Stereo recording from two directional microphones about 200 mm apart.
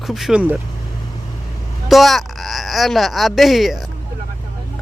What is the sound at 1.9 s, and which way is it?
Speech, centre (ahead or behind).